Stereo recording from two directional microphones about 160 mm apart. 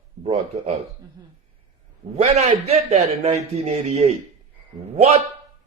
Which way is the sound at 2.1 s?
45° right (ahead or behind).